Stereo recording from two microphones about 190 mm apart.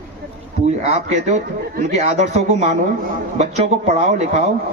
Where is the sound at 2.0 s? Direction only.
35° right (ahead or behind).